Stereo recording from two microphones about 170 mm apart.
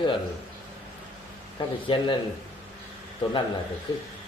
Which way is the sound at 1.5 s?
30° left (ahead or behind).